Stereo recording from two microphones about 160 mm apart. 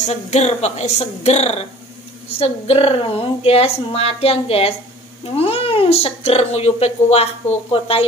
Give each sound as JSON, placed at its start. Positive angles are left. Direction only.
{"t": 0.1, "sound": "a woman's voice", "side_deg": 45}